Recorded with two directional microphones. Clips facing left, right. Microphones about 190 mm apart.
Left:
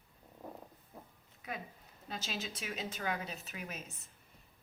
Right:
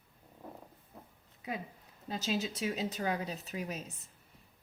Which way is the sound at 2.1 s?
25° right (ahead or behind).